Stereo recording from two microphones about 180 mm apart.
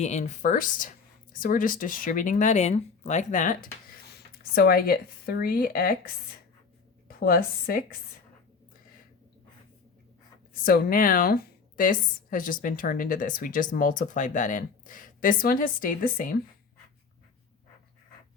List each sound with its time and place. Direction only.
0.0 s a woman's voice: 40° left (ahead or behind); by 6.0 s 55° left (ahead or behind)
7.2 s a woman's voice: 55° left (ahead or behind)
10.6 s a woman's voice: 55° left (ahead or behind)